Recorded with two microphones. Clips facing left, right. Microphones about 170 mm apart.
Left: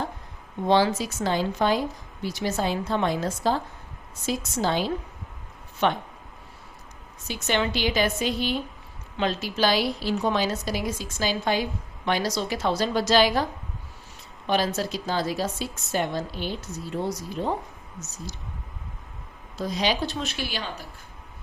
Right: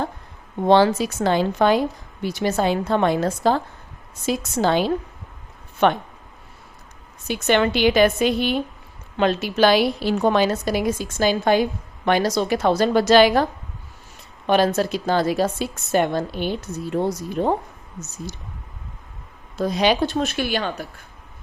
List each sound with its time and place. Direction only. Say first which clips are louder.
0.7 s a woman's voice: right 5 dB; 60° right (ahead or behind)
7.3 s a woman's voice: right 7 dB; 60° right (ahead or behind)
19.5 s a woman's voice: right 7 dB; 60° right (ahead or behind)